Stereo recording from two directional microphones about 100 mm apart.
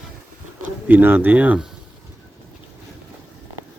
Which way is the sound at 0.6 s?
15° right (ahead or behind).